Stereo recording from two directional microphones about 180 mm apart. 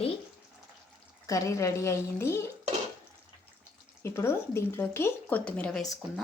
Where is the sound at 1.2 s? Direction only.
20° left (ahead or behind).